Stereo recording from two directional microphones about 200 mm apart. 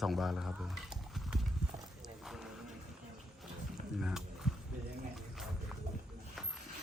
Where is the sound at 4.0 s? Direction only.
5° right (ahead or behind).